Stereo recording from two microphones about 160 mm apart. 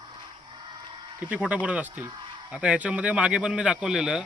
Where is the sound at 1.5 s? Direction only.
10° right (ahead or behind).